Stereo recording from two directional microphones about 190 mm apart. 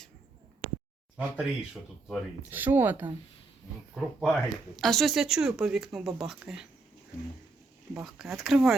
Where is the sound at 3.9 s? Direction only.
Centre (ahead or behind).